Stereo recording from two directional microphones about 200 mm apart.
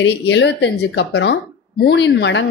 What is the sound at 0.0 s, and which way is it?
Speech, 60° left (ahead or behind).